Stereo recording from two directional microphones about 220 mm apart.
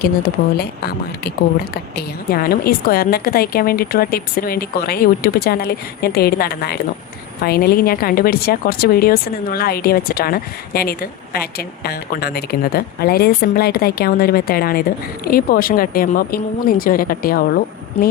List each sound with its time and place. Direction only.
0.0 s speech: 45° left (ahead or behind)